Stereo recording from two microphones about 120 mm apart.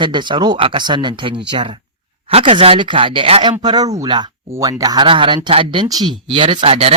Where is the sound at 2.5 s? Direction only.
45° right (ahead or behind).